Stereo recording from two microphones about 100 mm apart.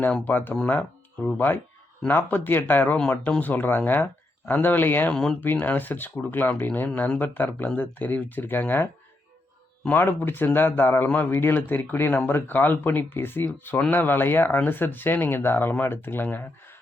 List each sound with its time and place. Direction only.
0.3 s a man's voice: 20° left (ahead or behind)
5.1 s speech: 5° left (ahead or behind)
5.4 s a man's voice: 20° left (ahead or behind)